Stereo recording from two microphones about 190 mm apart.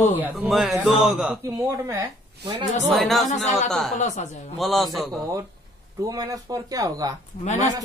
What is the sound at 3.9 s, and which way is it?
Speech, 40° left (ahead or behind).